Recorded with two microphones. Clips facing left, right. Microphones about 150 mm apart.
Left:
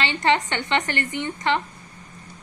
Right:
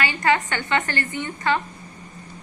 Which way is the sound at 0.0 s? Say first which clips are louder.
Even; 25° left (ahead or behind).